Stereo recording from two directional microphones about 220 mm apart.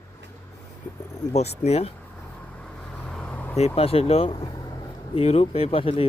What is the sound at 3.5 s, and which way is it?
Speech, 25° left (ahead or behind).